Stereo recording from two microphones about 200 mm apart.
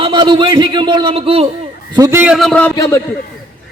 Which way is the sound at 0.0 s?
25° right (ahead or behind).